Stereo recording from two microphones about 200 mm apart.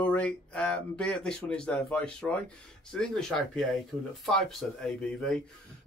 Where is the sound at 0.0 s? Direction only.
5° left (ahead or behind).